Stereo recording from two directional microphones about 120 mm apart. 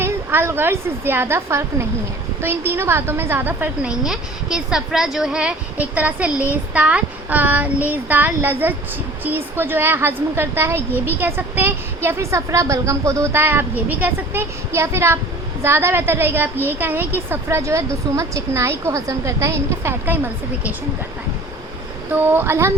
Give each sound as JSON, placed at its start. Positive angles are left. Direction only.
{"t": 0.0, "sound": "a woman's voice", "side_deg": -20}
{"t": 4.0, "sound": "speech", "side_deg": -5}
{"t": 6.5, "sound": "child singing", "side_deg": -10}
{"t": 9.2, "sound": "a woman's voice", "side_deg": -15}
{"t": 22.1, "sound": "a woman's voice", "side_deg": -15}